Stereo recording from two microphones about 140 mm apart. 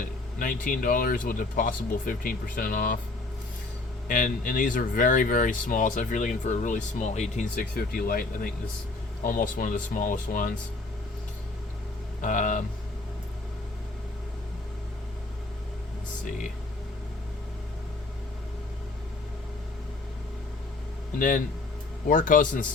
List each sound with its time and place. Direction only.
0.0 s speech: 75° left (ahead or behind)
4.1 s speech: 75° left (ahead or behind)
9.2 s speech: 75° left (ahead or behind)
12.2 s speech: 70° left (ahead or behind)
21.2 s speech: 75° left (ahead or behind)